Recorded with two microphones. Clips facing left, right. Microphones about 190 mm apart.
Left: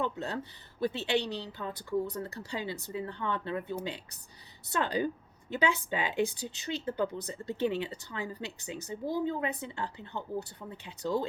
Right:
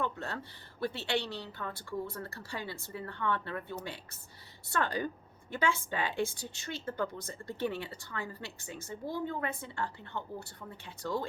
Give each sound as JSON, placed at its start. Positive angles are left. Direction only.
{"t": 0.0, "sound": "speech", "side_deg": 15}